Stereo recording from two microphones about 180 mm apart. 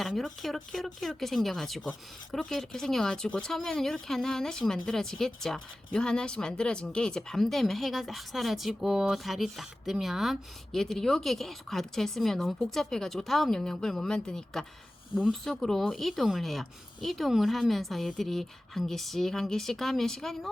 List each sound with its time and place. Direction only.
0.0 s a woman's voice: centre (ahead or behind)